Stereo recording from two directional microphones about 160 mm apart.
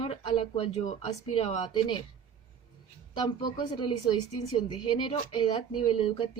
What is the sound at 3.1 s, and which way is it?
A woman's voice, 30° left (ahead or behind).